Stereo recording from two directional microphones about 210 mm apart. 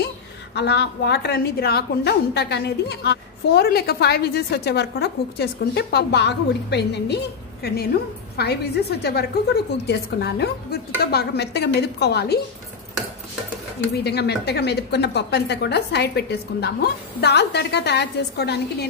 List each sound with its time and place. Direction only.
0.6 s a woman's voice: 50° left (ahead or behind)
13.9 s a woman's voice: 50° left (ahead or behind)